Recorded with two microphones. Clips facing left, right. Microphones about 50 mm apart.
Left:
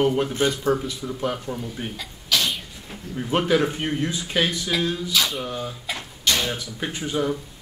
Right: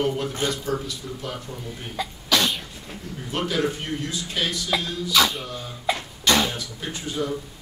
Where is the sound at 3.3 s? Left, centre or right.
Left.